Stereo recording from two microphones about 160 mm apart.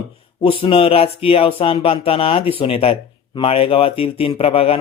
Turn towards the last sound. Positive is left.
turn(degrees=35)  # may be behind; listen again after turning